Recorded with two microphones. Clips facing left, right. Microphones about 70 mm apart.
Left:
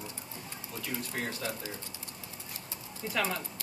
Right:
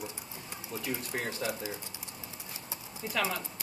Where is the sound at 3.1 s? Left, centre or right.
Centre.